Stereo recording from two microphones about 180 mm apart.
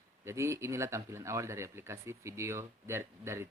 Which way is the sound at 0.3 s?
15° right (ahead or behind).